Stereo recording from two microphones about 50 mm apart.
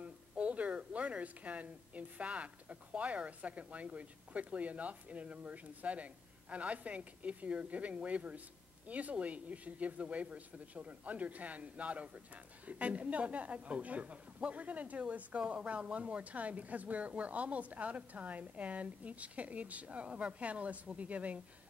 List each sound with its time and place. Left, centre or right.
0.0 s a woman's voice: right